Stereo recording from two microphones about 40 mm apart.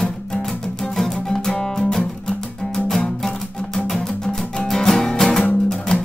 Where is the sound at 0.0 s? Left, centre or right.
Centre.